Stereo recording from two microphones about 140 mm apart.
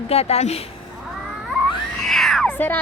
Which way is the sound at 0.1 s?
45° left (ahead or behind).